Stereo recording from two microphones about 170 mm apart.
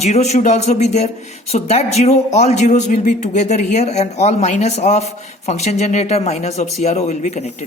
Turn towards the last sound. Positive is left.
turn(degrees=40)  # may be behind; listen again after turning